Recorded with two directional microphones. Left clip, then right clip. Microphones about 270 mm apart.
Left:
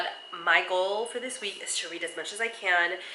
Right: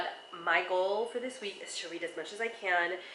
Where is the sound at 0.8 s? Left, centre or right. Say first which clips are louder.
Left 3 dB; right.